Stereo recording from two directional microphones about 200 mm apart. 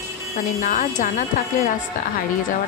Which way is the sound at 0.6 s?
40° left (ahead or behind).